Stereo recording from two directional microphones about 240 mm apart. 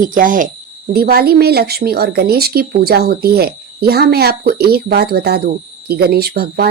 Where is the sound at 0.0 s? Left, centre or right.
Right.